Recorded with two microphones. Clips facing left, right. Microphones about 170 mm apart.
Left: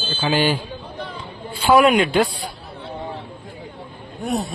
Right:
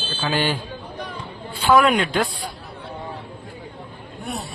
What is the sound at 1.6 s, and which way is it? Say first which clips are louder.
Speech: left 2 dB; 10° left (ahead or behind).